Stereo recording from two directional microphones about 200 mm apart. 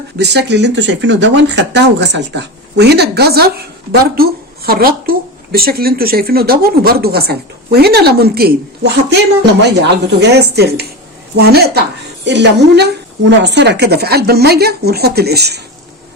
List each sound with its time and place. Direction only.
0.2 s a woman's voice: 60° right (ahead or behind)